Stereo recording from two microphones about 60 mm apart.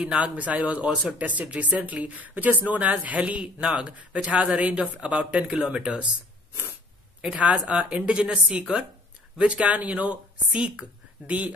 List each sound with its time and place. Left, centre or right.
0.0 s speech: centre
7.2 s speech: right